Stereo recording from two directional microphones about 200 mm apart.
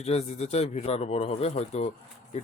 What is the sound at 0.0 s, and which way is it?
Speech, 35° left (ahead or behind).